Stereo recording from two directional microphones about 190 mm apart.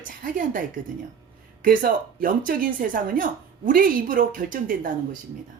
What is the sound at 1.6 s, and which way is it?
Speech, 45° right (ahead or behind).